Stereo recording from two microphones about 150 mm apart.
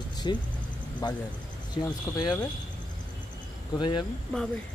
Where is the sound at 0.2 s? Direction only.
30° left (ahead or behind).